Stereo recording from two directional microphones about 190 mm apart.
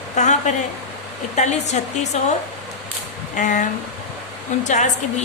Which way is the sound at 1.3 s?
35° left (ahead or behind).